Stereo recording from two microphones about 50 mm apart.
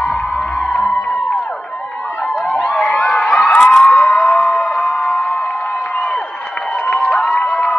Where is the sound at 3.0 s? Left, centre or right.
Centre.